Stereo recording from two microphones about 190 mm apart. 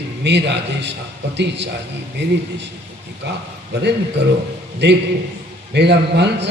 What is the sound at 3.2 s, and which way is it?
Speech, 65° right (ahead or behind).